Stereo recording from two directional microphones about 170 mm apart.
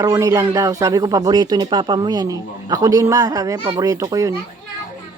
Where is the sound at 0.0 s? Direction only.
20° right (ahead or behind).